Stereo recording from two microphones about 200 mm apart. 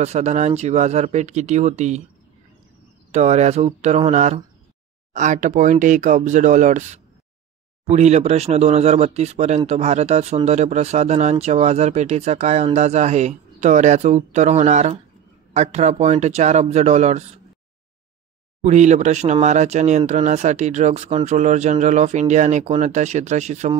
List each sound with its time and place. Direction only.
0.0 s speech: 35° right (ahead or behind)
3.1 s speech: 35° right (ahead or behind)
18.6 s speech: 35° right (ahead or behind)